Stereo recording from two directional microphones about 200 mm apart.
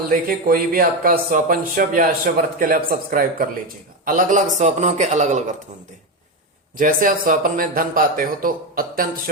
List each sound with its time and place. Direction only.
0.3 s a man's voice: 45° right (ahead or behind)
6.7 s speech: 45° right (ahead or behind)